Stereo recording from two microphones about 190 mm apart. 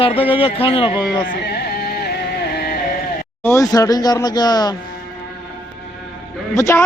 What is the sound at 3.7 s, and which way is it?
A man's voice, 20° left (ahead or behind).